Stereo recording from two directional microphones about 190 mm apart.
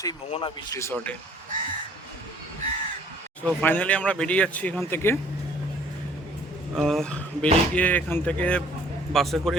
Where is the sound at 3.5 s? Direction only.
10° left (ahead or behind).